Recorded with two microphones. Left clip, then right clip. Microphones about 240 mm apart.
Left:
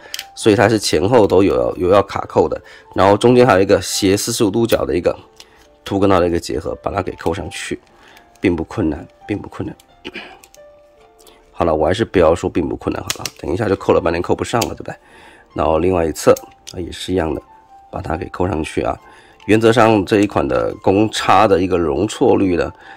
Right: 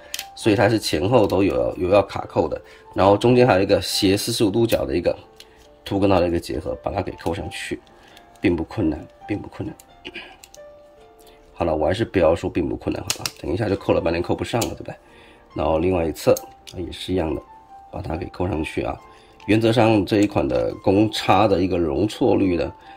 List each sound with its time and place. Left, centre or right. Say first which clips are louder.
0.0 s music: left 6 dB; left
1.2 s speech: left 6 dB; left
11.6 s speech: left 5 dB; centre